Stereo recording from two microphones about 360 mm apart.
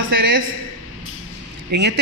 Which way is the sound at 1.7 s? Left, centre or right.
Right.